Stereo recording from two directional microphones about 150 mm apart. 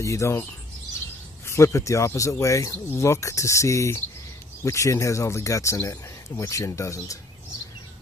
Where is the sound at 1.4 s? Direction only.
20° left (ahead or behind).